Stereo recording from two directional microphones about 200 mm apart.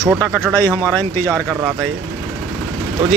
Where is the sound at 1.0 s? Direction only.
10° left (ahead or behind).